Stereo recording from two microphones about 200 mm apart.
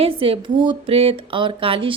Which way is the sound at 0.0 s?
25° right (ahead or behind).